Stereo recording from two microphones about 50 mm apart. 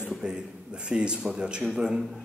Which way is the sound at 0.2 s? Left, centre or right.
Centre.